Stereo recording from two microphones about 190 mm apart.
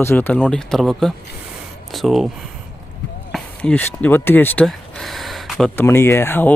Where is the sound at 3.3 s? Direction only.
5° left (ahead or behind).